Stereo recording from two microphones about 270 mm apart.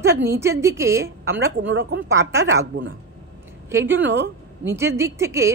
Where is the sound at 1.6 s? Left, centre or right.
Right.